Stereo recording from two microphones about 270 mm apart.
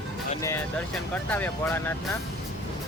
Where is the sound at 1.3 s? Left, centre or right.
Centre.